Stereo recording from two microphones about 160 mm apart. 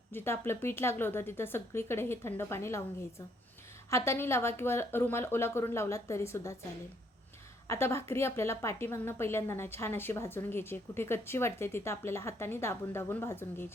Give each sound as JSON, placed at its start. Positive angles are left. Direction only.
{"t": 0.1, "sound": "a woman's voice", "side_deg": 15}
{"t": 7.7, "sound": "a woman's voice", "side_deg": 15}